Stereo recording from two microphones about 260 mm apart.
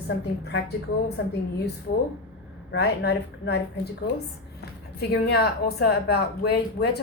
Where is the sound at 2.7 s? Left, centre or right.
Left.